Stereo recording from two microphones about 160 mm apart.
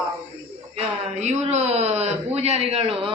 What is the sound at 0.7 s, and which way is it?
A man's voice, 45° right (ahead or behind).